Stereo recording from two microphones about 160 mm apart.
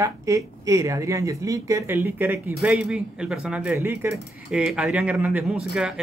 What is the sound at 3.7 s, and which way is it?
Speech, 15° right (ahead or behind).